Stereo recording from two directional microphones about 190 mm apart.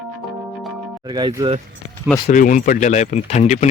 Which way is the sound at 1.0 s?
20° right (ahead or behind).